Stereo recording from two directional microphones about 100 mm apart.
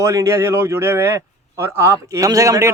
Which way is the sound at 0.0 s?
30° right (ahead or behind).